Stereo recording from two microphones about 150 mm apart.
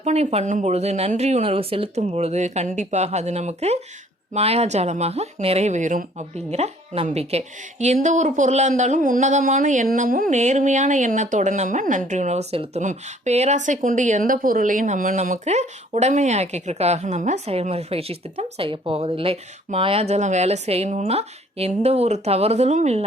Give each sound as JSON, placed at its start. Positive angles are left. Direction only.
{"t": 0.0, "sound": "speech", "side_deg": -45}